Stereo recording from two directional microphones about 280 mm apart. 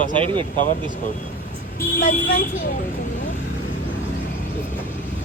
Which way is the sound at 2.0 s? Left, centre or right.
Left.